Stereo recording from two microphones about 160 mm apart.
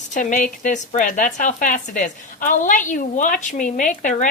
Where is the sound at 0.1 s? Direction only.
55° left (ahead or behind).